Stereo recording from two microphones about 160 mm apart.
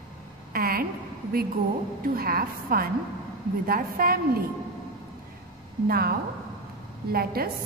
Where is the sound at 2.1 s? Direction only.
70° right (ahead or behind).